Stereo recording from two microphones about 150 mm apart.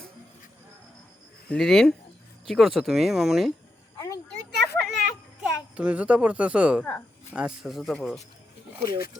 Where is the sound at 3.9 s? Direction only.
25° left (ahead or behind).